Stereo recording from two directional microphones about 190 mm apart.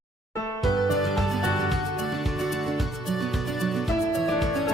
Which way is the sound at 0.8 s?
Centre (ahead or behind).